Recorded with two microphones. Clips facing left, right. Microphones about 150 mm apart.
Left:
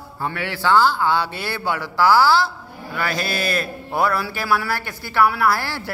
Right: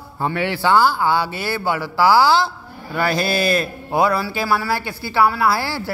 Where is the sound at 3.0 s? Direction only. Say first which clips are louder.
Right 5 dB; 30° right (ahead or behind).